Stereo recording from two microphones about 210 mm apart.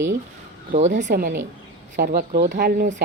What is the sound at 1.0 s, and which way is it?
Speech, 50° right (ahead or behind).